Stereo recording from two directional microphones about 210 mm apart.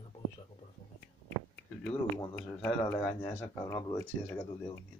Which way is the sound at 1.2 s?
50° left (ahead or behind).